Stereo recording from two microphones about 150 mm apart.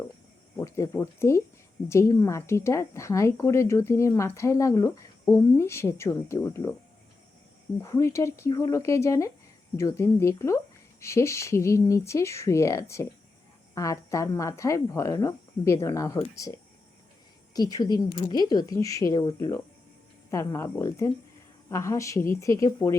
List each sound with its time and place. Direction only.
0.6 s speech: 20° left (ahead or behind)
7.8 s speech: 20° left (ahead or behind)
17.5 s speech: 25° left (ahead or behind)